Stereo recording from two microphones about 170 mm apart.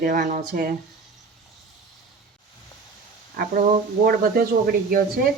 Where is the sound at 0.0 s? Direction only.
50° right (ahead or behind).